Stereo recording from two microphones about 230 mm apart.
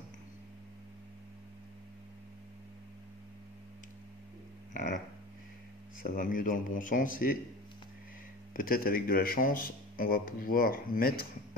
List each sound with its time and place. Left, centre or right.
6.0 s a man's voice: left
8.5 s a man's voice: left